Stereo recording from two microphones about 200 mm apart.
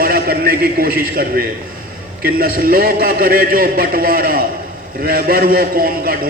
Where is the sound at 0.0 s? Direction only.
45° right (ahead or behind).